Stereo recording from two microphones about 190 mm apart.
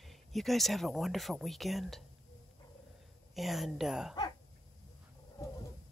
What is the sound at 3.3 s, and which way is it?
Speech, centre (ahead or behind).